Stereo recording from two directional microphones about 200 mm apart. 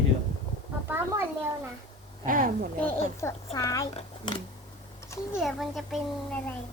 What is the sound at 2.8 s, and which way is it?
A child's voice, 15° left (ahead or behind).